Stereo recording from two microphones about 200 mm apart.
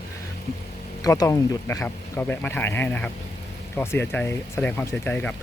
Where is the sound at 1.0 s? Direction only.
15° left (ahead or behind).